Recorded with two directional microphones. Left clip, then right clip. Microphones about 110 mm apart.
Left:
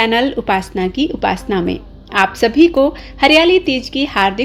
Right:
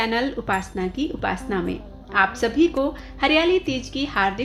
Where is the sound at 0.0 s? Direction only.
50° left (ahead or behind).